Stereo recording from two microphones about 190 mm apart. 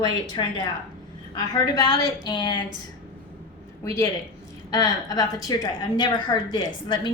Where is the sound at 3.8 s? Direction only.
15° left (ahead or behind).